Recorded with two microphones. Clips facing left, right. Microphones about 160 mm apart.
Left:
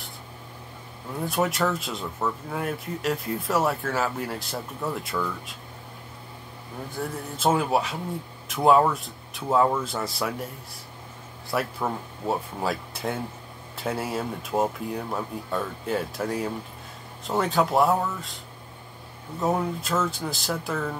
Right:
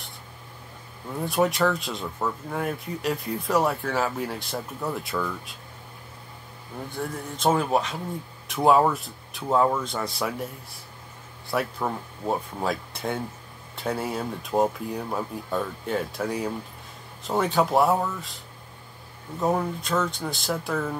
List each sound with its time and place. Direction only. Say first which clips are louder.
1.2 s speech: right 2 dB; centre (ahead or behind)
6.9 s speech: even; 5° left (ahead or behind)
19.4 s speech: even; 5° left (ahead or behind)